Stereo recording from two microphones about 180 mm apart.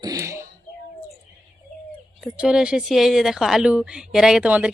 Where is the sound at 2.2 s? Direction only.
5° right (ahead or behind).